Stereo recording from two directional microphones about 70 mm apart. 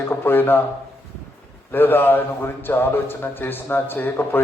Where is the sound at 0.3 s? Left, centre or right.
Left.